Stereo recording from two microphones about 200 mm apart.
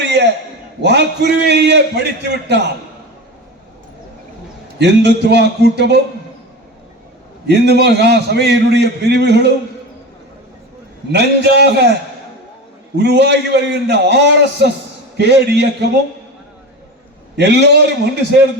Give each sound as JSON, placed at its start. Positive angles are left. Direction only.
{"t": 0.0, "sound": "a sound", "side_deg": -60}
{"t": 0.8, "sound": "a man's voice", "side_deg": -60}
{"t": 4.8, "sound": "a man's voice", "side_deg": -60}
{"t": 7.4, "sound": "a man's voice", "side_deg": -55}
{"t": 11.1, "sound": "a man's voice", "side_deg": -55}
{"t": 13.0, "sound": "a man's voice", "side_deg": -60}
{"t": 17.3, "sound": "a man's voice", "side_deg": -60}